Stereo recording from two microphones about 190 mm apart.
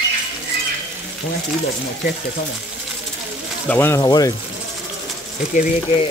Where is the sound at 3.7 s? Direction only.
10° left (ahead or behind).